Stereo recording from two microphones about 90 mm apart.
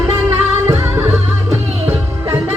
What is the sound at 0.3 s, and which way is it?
Music, 30° right (ahead or behind).